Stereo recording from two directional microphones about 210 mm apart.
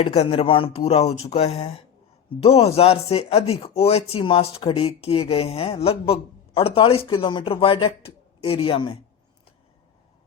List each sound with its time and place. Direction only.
0.0 s speech: 30° left (ahead or behind)